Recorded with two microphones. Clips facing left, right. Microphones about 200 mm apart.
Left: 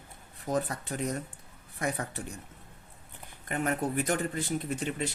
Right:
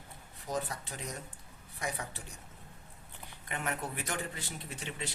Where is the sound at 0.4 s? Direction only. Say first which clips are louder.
Left 6 dB; 50° left (ahead or behind).